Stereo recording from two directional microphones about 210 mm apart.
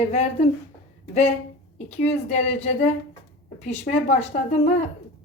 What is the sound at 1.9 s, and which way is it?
Speech, 35° left (ahead or behind).